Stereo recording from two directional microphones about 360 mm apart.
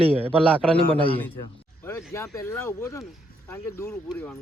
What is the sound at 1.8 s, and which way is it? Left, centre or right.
Speech, centre.